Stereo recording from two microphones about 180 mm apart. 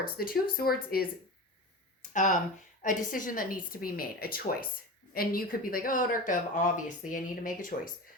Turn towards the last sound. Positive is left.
turn(degrees=45)  # may be behind; listen again after turning